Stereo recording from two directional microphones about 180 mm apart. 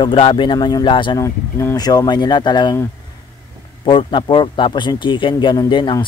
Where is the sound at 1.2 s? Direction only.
15° left (ahead or behind).